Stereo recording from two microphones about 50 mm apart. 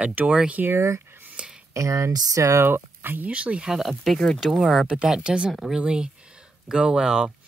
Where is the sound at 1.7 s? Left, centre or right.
Right.